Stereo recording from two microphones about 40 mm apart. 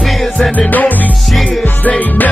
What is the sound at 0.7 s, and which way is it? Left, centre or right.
Music, left.